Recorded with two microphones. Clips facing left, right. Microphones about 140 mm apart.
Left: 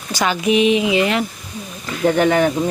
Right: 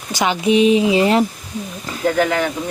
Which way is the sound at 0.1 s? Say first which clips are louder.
Right 1 dB; 20° right (ahead or behind).